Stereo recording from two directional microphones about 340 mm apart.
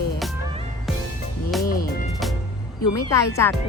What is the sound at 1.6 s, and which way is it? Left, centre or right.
Speech, left.